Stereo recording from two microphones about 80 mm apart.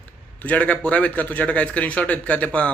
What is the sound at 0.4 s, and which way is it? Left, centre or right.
A man's voice, centre.